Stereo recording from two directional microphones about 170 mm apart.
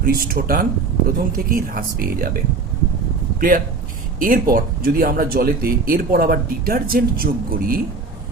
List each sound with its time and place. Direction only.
0.0 s speech: 60° right (ahead or behind)
4.2 s speech: 55° right (ahead or behind)